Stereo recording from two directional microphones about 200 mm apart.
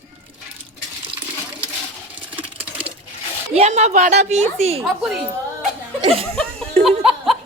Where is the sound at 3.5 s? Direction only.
35° right (ahead or behind).